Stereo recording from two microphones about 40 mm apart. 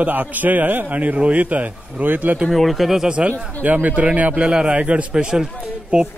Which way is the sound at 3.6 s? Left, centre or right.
Right.